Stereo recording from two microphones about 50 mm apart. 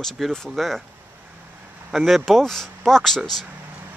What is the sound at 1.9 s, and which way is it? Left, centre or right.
Speech, centre.